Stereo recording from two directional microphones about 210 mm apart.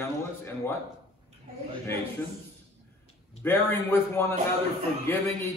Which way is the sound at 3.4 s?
10° left (ahead or behind).